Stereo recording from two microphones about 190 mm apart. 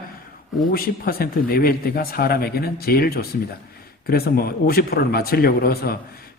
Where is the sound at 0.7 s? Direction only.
50° left (ahead or behind).